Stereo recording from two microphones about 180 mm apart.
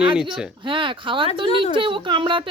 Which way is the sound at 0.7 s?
30° right (ahead or behind).